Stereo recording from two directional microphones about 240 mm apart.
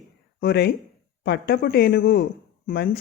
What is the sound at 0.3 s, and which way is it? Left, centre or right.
Speech, left.